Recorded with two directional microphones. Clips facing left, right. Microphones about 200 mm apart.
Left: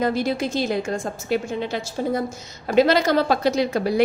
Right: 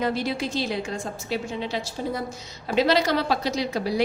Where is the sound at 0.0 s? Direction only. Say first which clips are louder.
Left 4 dB; 45° left (ahead or behind).